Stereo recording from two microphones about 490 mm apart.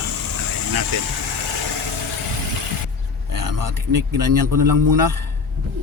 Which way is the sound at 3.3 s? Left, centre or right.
Right.